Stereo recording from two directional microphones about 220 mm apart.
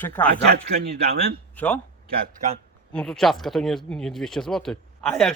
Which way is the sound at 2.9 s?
5° left (ahead or behind).